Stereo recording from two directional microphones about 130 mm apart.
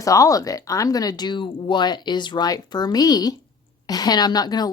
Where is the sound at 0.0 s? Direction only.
25° left (ahead or behind).